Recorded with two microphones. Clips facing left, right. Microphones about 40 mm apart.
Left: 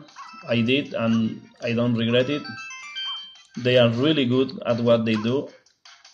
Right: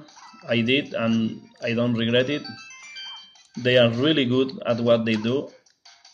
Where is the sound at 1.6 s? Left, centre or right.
Right.